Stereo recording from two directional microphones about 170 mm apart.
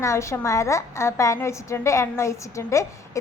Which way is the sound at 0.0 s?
15° left (ahead or behind).